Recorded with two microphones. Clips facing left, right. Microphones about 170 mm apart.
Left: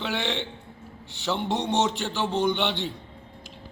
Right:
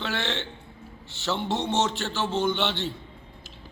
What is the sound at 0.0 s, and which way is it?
A man's voice, 15° left (ahead or behind).